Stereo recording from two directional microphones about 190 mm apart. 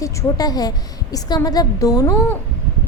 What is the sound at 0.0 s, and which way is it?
A woman's voice, 20° left (ahead or behind).